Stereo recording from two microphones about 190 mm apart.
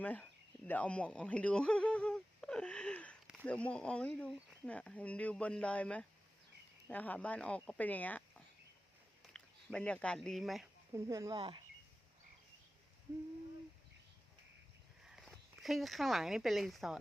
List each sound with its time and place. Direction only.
0.0 s speech: 5° left (ahead or behind)
9.3 s speech: 5° left (ahead or behind)
10.9 s speech: 15° right (ahead or behind)
11.3 s speech: 25° right (ahead or behind)
15.0 s speech: centre (ahead or behind)